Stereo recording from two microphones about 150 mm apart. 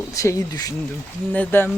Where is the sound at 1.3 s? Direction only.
10° left (ahead or behind).